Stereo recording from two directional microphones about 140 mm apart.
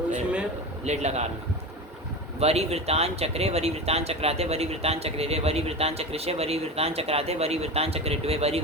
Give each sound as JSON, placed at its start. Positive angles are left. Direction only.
{"t": 0.9, "sound": "speech", "side_deg": -50}
{"t": 2.4, "sound": "speech", "side_deg": -50}